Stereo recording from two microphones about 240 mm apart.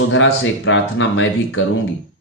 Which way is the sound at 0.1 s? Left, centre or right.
Left.